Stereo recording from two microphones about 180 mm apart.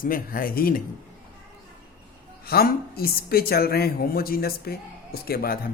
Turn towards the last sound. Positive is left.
turn(degrees=55)  # may be behind; listen again after turning